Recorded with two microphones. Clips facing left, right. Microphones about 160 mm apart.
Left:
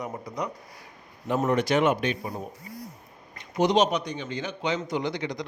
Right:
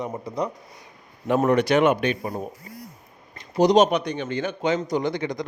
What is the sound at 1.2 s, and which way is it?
Speech, 65° right (ahead or behind).